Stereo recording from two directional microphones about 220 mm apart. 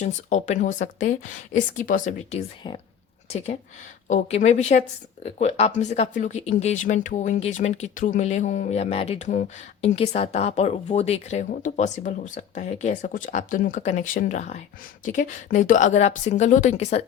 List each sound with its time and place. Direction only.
0.0 s speech: 35° left (ahead or behind)
2.6 s speech: 20° left (ahead or behind)